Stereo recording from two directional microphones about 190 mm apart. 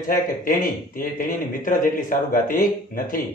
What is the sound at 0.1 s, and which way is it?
Speech, 45° left (ahead or behind).